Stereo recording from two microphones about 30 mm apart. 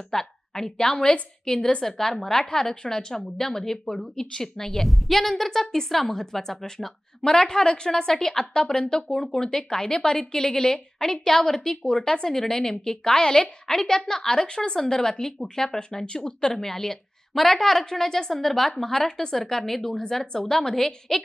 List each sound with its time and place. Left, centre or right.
0.1 s a sound: centre
0.7 s a woman's voice: left; by 4.1 s centre
4.2 s a woman's voice: centre
16.1 s a woman's voice: left
16.6 s a woman's voice: centre